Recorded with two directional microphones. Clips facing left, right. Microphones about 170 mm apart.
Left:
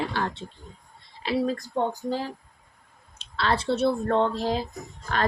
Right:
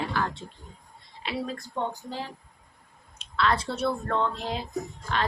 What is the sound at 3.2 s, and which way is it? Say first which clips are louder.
A woman's voice: even; 30° left (ahead or behind).